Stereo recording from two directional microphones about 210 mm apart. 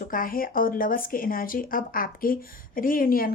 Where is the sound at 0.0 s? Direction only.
40° left (ahead or behind).